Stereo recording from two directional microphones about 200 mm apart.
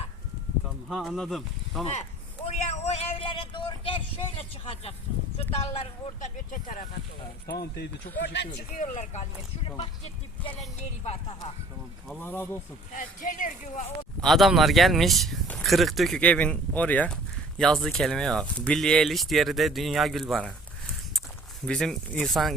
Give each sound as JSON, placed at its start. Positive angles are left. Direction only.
{"t": 0.9, "sound": "speech", "side_deg": 0}
{"t": 2.6, "sound": "speech", "side_deg": 35}
{"t": 7.6, "sound": "speech", "side_deg": 55}
{"t": 8.8, "sound": "speech", "side_deg": 35}
{"t": 12.2, "sound": "speech", "side_deg": 10}
{"t": 12.9, "sound": "speech", "side_deg": 40}
{"t": 14.2, "sound": "speech", "side_deg": 0}
{"t": 21.7, "sound": "speech", "side_deg": 5}